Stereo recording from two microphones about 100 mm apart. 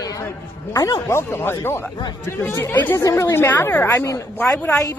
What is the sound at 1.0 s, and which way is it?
A woman's voice, 25° left (ahead or behind).